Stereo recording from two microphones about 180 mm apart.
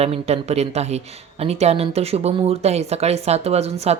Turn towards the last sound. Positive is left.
turn(degrees=-35)  # may be behind; listen again after turning